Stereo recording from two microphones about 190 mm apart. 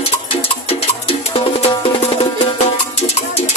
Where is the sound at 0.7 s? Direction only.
30° left (ahead or behind).